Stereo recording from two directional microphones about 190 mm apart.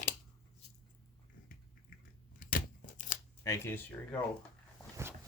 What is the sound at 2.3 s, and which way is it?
Scissors, 45° left (ahead or behind).